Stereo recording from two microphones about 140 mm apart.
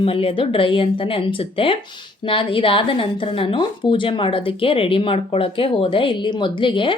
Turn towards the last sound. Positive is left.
turn(degrees=35)  # may be behind; listen again after turning